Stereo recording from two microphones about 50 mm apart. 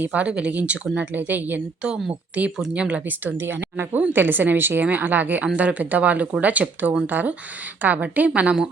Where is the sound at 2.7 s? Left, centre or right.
Right.